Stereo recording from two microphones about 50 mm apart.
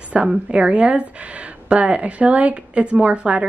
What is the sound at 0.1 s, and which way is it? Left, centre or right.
A woman's voice, right.